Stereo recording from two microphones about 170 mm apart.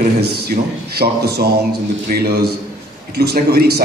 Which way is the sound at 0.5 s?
60° right (ahead or behind).